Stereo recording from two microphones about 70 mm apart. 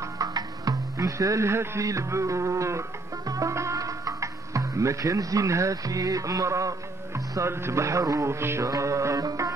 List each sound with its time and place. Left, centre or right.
0.2 s music: right
1.9 s a man's voice: right
8.6 s music: right